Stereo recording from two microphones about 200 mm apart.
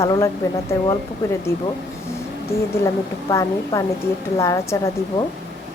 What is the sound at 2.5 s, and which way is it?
Speech, 15° left (ahead or behind).